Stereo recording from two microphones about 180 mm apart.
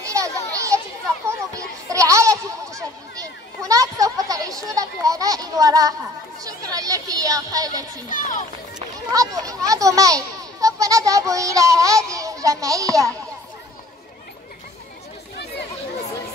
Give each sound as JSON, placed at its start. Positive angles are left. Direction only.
{"t": 0.0, "sound": "children playing", "side_deg": -15}
{"t": 1.9, "sound": "a sound", "side_deg": -15}
{"t": 4.6, "sound": "children playing", "side_deg": -20}
{"t": 6.4, "sound": "chatter", "side_deg": -20}
{"t": 8.1, "sound": "run", "side_deg": 45}
{"t": 9.1, "sound": "a sound", "side_deg": -20}
{"t": 12.1, "sound": "a child's voice", "side_deg": -20}